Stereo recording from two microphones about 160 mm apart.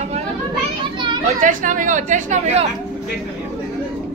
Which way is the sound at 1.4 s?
55° right (ahead or behind).